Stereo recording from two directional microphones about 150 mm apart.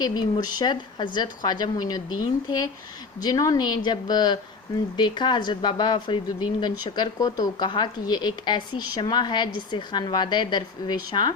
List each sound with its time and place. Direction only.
0.0 s speech: 30° left (ahead or behind)
3.2 s a woman's voice: 25° left (ahead or behind)